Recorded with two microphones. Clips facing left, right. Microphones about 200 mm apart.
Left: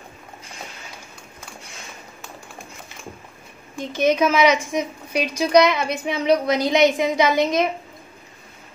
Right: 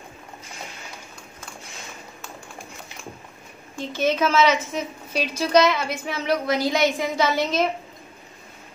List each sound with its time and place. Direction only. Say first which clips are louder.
3.7 s a woman's voice: left 4 dB; 15° left (ahead or behind)